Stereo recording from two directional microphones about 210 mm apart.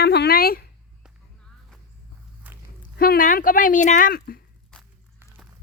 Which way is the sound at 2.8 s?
40° left (ahead or behind).